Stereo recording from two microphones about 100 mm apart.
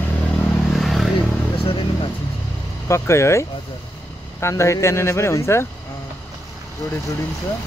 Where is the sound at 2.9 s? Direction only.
30° left (ahead or behind).